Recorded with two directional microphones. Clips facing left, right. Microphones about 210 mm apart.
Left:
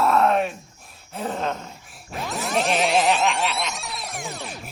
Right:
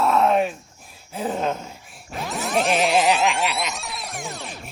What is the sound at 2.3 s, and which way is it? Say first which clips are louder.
Music: right 2 dB; centre (ahead or behind).